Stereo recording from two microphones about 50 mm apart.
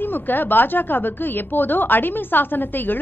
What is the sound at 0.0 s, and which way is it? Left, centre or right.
A woman's voice, left.